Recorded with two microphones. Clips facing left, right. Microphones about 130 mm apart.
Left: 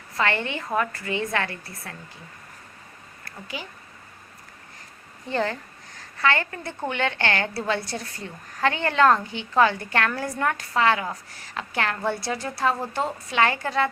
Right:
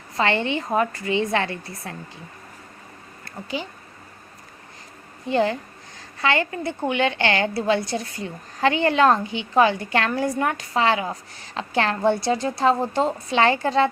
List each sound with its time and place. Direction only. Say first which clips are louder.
0.2 s a woman's voice: right 4 dB; 20° right (ahead or behind)
3.2 s speech: right 6 dB; 25° right (ahead or behind)
5.3 s a woman's voice: right 5 dB; 15° right (ahead or behind)